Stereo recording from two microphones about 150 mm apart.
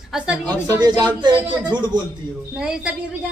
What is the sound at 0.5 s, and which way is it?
Speech, 25° right (ahead or behind).